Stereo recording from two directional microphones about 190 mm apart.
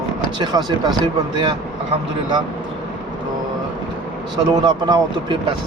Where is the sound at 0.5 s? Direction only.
20° right (ahead or behind).